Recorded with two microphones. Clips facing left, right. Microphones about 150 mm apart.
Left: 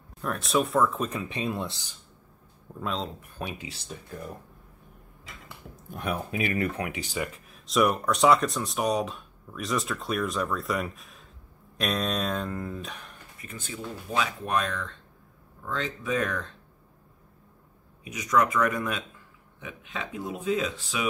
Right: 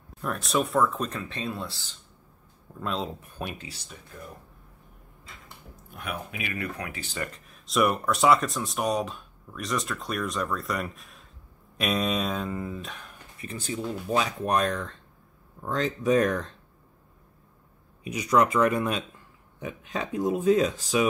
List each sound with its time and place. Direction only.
0.2 s speech: centre (ahead or behind); by 2.0 s 20° left (ahead or behind)
2.8 s speech: centre (ahead or behind)
5.9 s speech: 30° left (ahead or behind); by 13.1 s centre (ahead or behind)
13.4 s speech: 35° right (ahead or behind)
18.1 s speech: 30° right (ahead or behind)
19.6 s speech: 40° right (ahead or behind)